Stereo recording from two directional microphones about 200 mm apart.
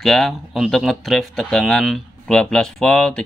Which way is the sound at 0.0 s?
Centre (ahead or behind).